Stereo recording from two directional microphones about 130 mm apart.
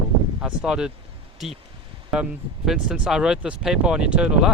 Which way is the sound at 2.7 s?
5° right (ahead or behind).